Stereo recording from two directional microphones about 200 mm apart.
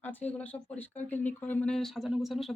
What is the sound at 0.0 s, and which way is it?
Speech, 10° left (ahead or behind).